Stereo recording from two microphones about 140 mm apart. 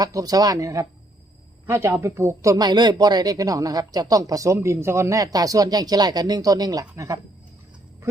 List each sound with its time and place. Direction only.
0.0 s speech: 25° right (ahead or behind)